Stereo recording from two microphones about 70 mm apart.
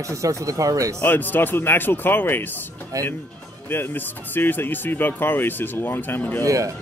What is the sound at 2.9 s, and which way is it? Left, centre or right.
Speech, right.